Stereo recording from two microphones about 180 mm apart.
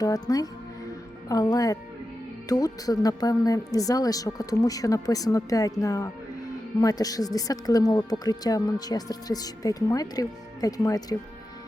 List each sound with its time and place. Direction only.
0.0 s speech: 20° left (ahead or behind)